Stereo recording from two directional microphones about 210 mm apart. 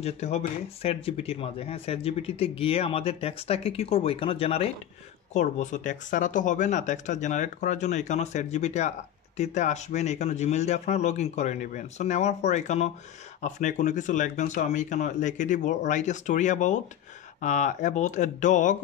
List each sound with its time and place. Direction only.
0.0 s speech: 30° left (ahead or behind)